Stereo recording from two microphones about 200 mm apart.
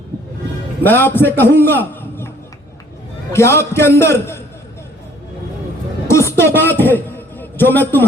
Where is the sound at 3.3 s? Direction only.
15° left (ahead or behind).